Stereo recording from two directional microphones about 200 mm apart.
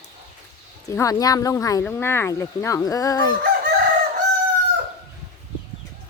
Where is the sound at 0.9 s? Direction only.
15° left (ahead or behind).